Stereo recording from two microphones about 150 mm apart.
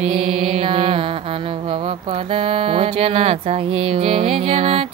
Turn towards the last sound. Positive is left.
turn(degrees=-40)  # may be behind; listen again after turning